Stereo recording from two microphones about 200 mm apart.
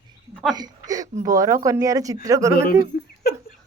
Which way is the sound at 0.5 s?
20° right (ahead or behind).